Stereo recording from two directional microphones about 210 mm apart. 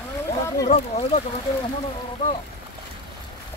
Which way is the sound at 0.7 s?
30° left (ahead or behind).